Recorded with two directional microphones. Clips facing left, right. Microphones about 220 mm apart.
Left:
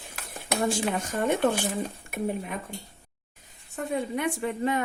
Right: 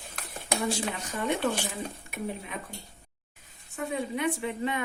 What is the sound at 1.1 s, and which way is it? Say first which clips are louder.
Speech: left 2 dB; 45° left (ahead or behind).